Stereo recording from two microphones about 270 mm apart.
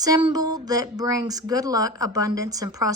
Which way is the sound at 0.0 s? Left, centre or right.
Centre.